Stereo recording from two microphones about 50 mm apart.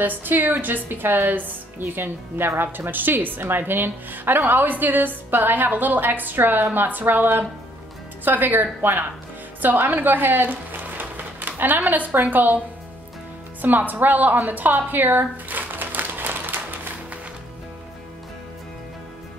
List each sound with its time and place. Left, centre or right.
0.0 s a woman's voice: right
9.6 s a sound: right
11.9 s a woman's voice: right
13.6 s music: right